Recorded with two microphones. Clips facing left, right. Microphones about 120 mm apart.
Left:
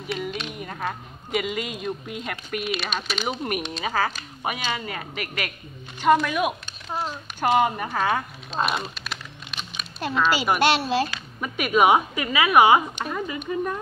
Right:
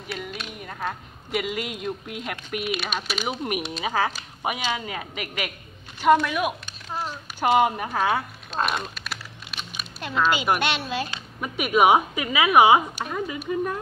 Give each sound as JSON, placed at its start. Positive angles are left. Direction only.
{"t": 0.1, "sound": "a woman's voice", "side_deg": -5}
{"t": 6.1, "sound": "speech", "side_deg": 0}
{"t": 6.9, "sound": "a child's voice", "side_deg": 15}
{"t": 7.3, "sound": "a woman's voice", "side_deg": -10}
{"t": 8.5, "sound": "typing", "side_deg": 5}
{"t": 10.6, "sound": "speech", "side_deg": 30}
{"t": 11.4, "sound": "a woman's voice", "side_deg": -10}